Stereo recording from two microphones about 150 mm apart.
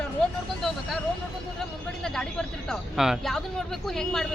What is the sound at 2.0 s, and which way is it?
Speech, 5° left (ahead or behind).